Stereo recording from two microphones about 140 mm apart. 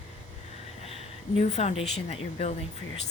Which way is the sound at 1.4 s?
50° left (ahead or behind).